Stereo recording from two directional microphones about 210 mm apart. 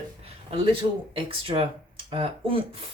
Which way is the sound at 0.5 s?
25° right (ahead or behind).